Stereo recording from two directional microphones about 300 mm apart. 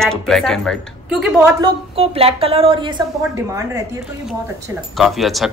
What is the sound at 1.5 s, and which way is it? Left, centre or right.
A woman's voice, centre.